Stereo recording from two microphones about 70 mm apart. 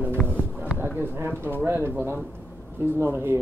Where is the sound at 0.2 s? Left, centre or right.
Centre.